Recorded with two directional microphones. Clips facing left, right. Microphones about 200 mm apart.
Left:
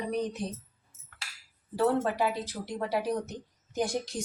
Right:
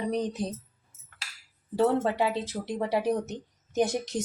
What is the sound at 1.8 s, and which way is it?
Speech, 25° right (ahead or behind).